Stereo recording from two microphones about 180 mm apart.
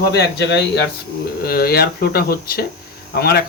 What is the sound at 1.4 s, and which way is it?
Speech, 55° left (ahead or behind).